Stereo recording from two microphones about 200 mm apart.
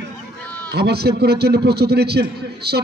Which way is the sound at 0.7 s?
55° right (ahead or behind).